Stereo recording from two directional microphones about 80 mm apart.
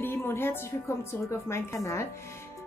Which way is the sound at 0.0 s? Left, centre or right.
Left.